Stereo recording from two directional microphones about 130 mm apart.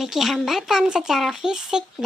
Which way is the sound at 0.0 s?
Centre (ahead or behind).